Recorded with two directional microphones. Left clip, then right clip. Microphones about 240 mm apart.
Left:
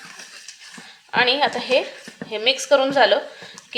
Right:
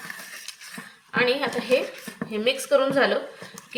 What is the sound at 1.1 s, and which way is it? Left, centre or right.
Speech, left.